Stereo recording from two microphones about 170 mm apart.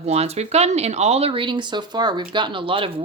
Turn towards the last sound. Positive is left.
turn(degrees=-30)  # may be behind; listen again after turning